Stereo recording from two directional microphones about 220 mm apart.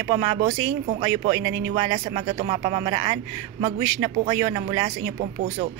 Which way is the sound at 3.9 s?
25° right (ahead or behind).